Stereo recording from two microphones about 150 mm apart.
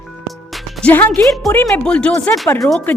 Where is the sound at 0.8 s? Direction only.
10° left (ahead or behind).